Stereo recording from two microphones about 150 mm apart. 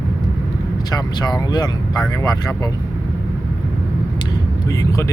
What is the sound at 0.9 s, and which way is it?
Speech, 25° left (ahead or behind).